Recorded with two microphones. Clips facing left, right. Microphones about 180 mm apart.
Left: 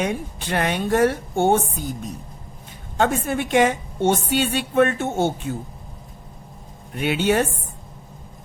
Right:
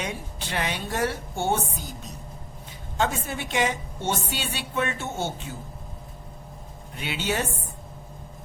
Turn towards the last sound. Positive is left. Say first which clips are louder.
# left 9 dB
turn(degrees=55)  # may be behind; listen again after turning